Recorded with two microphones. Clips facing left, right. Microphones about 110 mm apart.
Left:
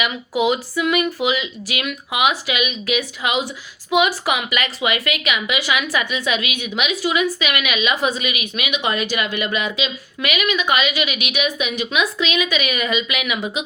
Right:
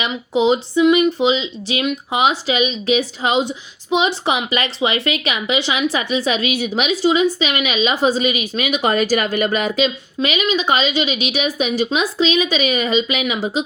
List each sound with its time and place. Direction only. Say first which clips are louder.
0.0 s a woman's voice: right 3 dB; 25° right (ahead or behind); by 9.9 s 40° right (ahead or behind)
10.2 s a woman's voice: right 2 dB; 25° right (ahead or behind)